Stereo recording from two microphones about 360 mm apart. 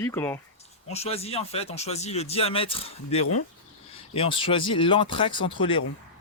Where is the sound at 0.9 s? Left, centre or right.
Centre.